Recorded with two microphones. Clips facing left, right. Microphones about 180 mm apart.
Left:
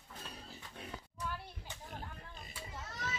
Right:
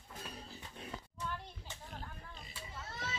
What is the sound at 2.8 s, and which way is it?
Children playing, 30° right (ahead or behind).